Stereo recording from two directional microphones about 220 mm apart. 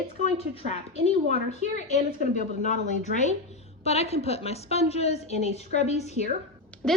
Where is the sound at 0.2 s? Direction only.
30° left (ahead or behind).